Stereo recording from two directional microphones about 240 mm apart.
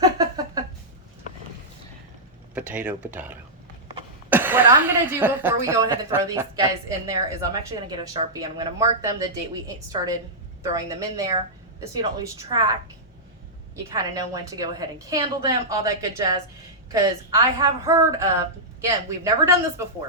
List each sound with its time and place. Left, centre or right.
0.0 s a sound: centre
2.6 s a woman's voice: centre
13.9 s a woman's voice: centre